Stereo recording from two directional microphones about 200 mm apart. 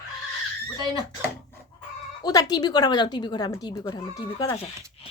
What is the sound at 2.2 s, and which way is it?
A woman's voice, 20° left (ahead or behind).